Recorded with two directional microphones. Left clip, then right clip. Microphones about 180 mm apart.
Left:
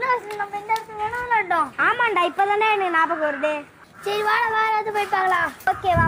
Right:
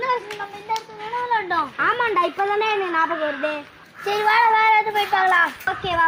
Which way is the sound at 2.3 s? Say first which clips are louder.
Left 2 dB; 20° left (ahead or behind).